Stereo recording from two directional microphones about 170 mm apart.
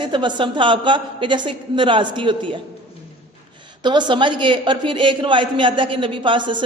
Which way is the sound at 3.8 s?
25° right (ahead or behind).